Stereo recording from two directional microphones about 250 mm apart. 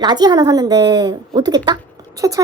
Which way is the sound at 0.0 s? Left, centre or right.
Centre.